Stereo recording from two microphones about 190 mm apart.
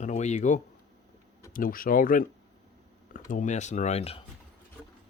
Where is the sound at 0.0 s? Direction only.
35° left (ahead or behind).